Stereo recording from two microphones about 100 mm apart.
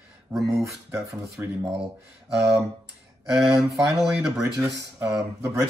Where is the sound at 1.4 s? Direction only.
20° right (ahead or behind).